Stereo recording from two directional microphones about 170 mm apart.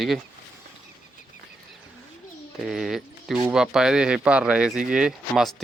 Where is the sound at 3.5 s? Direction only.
5° right (ahead or behind).